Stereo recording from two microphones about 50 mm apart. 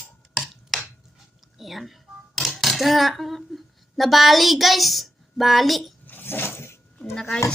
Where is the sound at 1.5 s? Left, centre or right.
Centre.